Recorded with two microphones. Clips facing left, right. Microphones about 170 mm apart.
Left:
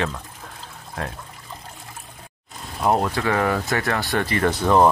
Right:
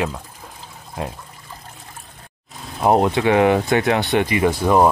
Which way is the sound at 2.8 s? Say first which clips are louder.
Right 5 dB; 35° right (ahead or behind).